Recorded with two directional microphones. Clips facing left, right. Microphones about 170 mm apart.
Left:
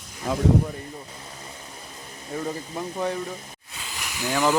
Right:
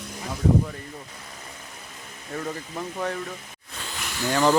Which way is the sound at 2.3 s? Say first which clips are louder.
Left 2 dB; 15° left (ahead or behind).